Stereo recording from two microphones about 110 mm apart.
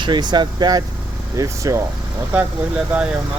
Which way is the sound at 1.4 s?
30° right (ahead or behind).